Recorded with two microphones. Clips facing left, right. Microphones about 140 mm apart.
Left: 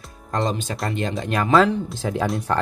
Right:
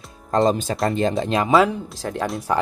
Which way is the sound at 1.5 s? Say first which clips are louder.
Left 2 dB; 5° right (ahead or behind).